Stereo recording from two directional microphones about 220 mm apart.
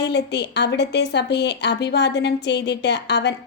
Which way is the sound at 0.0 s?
50° left (ahead or behind).